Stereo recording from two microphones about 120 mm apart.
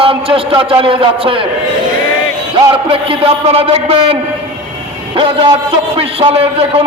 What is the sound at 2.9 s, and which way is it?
A man's voice, 50° right (ahead or behind).